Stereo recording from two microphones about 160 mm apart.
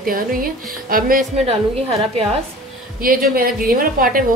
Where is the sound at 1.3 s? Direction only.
40° right (ahead or behind).